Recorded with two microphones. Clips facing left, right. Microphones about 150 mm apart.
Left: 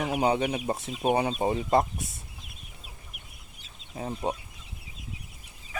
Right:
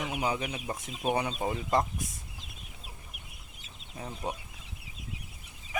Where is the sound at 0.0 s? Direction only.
35° left (ahead or behind).